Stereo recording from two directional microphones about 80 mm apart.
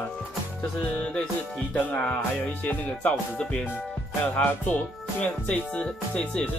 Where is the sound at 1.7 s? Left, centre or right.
Left.